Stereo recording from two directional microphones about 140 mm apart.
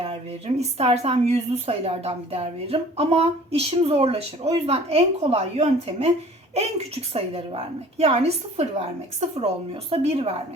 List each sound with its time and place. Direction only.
0.0 s speech: 45° right (ahead or behind)
9.9 s speech: 45° right (ahead or behind)